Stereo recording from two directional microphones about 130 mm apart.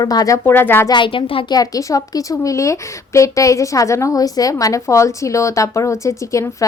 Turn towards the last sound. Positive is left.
turn(degrees=25)  # may be behind; listen again after turning